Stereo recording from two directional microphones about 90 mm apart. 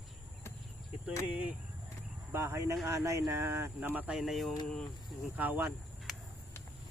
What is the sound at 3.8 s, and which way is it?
Speech, 20° right (ahead or behind).